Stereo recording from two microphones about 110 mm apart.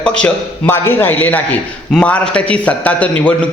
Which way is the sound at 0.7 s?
20° left (ahead or behind).